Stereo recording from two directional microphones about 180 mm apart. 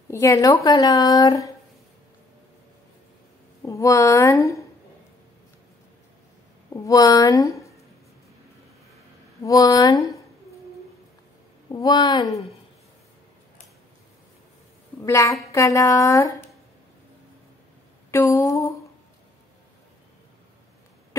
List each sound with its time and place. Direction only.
0.1 s speech: 15° left (ahead or behind)
3.6 s speech: 15° left (ahead or behind)
6.7 s speech: 20° left (ahead or behind)
9.4 s speech: 20° left (ahead or behind)
11.7 s speech: 20° left (ahead or behind)
15.0 s speech: 15° left (ahead or behind)
18.1 s speech: 15° left (ahead or behind)